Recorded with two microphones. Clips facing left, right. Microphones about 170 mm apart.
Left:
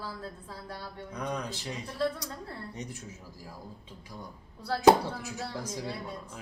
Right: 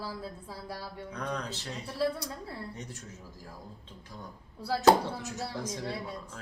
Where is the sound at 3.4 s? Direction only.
10° left (ahead or behind).